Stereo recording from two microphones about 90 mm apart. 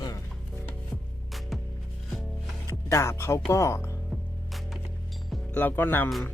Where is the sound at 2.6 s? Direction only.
30° left (ahead or behind).